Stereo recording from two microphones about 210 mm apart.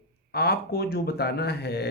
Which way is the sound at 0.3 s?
50° left (ahead or behind).